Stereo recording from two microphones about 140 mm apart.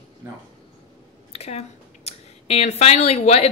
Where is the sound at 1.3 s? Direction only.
50° left (ahead or behind).